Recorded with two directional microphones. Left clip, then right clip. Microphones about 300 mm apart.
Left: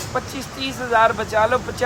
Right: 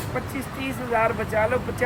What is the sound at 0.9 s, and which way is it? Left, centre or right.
Speech, centre.